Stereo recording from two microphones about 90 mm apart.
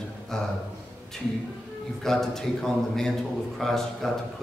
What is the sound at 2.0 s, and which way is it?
A man's voice, 5° left (ahead or behind).